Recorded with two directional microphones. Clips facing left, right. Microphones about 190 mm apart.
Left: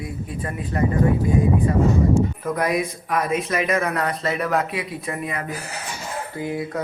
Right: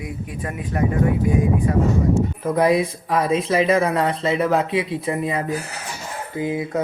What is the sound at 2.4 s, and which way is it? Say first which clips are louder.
Music: right 5 dB; 25° right (ahead or behind).